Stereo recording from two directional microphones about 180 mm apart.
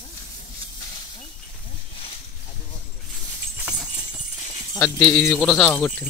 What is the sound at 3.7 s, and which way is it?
Clip-clop, 5° right (ahead or behind).